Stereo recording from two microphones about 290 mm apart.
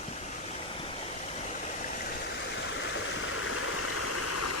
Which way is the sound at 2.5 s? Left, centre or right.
Left.